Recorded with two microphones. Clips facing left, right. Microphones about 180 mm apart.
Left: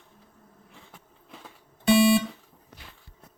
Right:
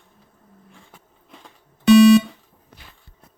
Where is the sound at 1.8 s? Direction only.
70° right (ahead or behind).